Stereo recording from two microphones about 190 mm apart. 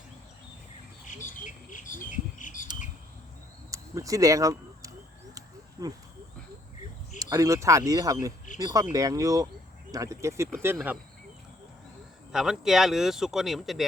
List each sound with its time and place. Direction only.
1.5 s speech: 45° left (ahead or behind)
3.7 s a sound: 15° right (ahead or behind)
5.8 s speech: 15° right (ahead or behind)
7.2 s speech: 15° right (ahead or behind)
12.3 s speech: 5° right (ahead or behind)